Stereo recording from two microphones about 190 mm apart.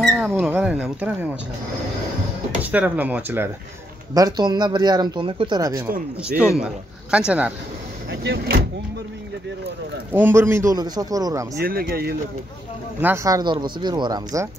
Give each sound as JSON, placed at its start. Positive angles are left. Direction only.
{"t": 0.0, "sound": "mouse", "side_deg": 5}
{"t": 0.4, "sound": "a sound", "side_deg": -5}
{"t": 2.6, "sound": "a man's voice", "side_deg": -10}
{"t": 4.1, "sound": "speech", "side_deg": -20}
{"t": 8.1, "sound": "speech", "side_deg": -60}
{"t": 10.1, "sound": "a man's voice", "side_deg": -10}
{"t": 11.6, "sound": "speech", "side_deg": -50}
{"t": 13.0, "sound": "speech", "side_deg": -15}